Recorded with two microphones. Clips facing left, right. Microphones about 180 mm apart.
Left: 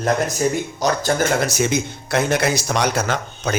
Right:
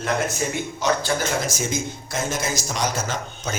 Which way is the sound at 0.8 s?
40° left (ahead or behind).